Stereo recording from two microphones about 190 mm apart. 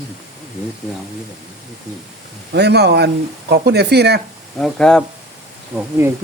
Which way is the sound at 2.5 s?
60° right (ahead or behind).